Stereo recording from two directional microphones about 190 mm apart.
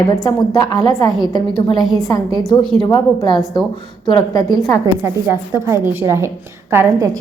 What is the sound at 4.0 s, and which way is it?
Speech, 20° left (ahead or behind).